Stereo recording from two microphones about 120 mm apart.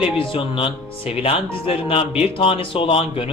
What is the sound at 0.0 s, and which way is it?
Speech, 50° left (ahead or behind).